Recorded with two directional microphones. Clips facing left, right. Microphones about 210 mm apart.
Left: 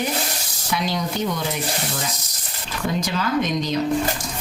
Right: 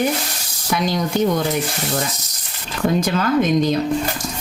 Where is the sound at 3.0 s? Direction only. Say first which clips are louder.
Right 5 dB; 50° right (ahead or behind).